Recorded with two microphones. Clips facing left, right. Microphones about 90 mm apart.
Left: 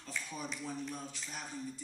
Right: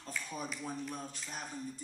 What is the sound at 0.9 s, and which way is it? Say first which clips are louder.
Speech: right 1 dB; 45° right (ahead or behind).